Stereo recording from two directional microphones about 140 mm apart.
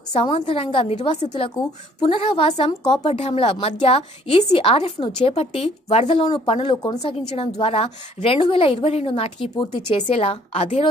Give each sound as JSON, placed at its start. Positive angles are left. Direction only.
{"t": 0.1, "sound": "a woman's voice", "side_deg": 45}
{"t": 2.8, "sound": "a woman's voice", "side_deg": 30}
{"t": 3.1, "sound": "a woman's voice", "side_deg": 45}
{"t": 7.0, "sound": "a woman's voice", "side_deg": 45}